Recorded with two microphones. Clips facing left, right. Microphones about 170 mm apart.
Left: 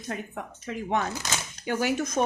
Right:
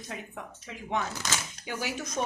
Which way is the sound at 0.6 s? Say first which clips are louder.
Left 5 dB; 50° left (ahead or behind).